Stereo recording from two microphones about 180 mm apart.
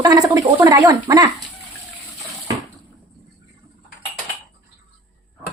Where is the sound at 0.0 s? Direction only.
20° right (ahead or behind).